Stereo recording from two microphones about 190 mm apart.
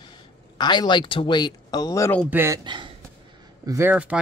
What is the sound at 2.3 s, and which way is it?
Speech, 15° right (ahead or behind).